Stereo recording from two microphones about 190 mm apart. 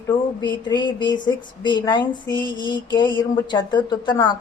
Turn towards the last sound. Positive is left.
turn(degrees=25)  # may be behind; listen again after turning